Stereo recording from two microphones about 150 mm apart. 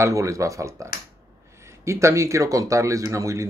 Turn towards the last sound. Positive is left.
turn(degrees=-20)  # may be behind; listen again after turning